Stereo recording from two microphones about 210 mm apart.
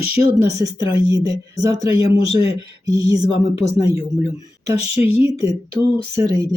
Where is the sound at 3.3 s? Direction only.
30° left (ahead or behind).